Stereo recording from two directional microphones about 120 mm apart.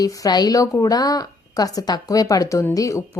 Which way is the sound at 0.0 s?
30° left (ahead or behind).